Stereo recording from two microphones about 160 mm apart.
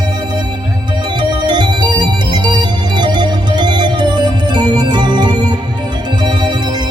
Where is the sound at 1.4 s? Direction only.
30° right (ahead or behind).